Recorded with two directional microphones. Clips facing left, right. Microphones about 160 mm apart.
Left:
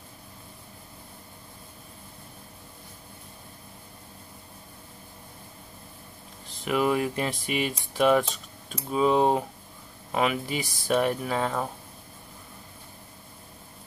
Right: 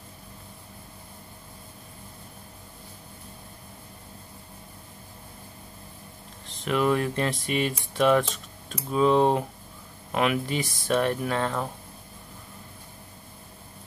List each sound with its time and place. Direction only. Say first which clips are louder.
6.6 s speech: right 1 dB; 5° left (ahead or behind)